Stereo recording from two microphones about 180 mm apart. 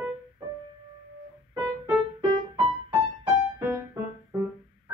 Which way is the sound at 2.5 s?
20° right (ahead or behind).